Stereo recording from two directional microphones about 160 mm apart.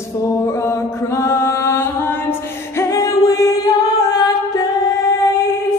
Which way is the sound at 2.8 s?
20° left (ahead or behind).